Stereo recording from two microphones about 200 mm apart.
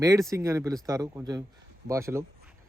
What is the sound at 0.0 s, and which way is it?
Speech, 15° right (ahead or behind).